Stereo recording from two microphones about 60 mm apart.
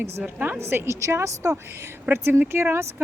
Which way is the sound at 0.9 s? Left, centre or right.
Right.